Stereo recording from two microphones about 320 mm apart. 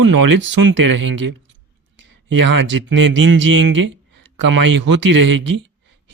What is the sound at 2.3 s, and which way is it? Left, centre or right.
Speech, right.